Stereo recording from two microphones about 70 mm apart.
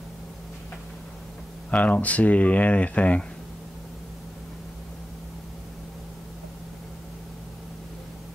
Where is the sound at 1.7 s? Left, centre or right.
Left.